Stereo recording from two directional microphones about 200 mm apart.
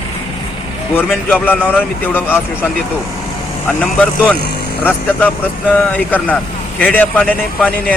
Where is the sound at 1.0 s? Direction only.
10° left (ahead or behind).